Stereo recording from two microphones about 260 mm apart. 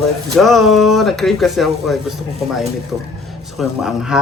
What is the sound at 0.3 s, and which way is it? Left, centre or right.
Speech, centre.